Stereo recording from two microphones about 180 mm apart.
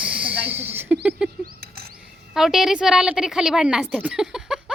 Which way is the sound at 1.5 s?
60° right (ahead or behind).